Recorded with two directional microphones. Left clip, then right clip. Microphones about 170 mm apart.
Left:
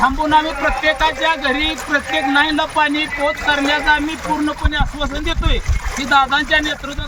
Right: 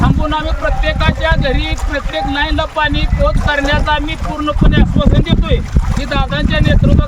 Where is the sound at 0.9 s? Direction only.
25° right (ahead or behind).